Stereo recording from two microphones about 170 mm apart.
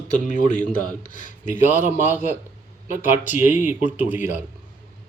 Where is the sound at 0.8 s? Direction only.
50° left (ahead or behind).